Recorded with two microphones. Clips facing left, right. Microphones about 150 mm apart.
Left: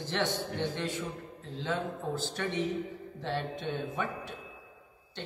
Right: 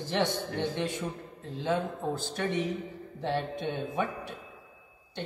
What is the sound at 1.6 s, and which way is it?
A man's voice, 15° right (ahead or behind).